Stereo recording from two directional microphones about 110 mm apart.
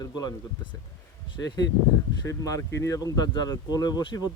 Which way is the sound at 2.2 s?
30° left (ahead or behind).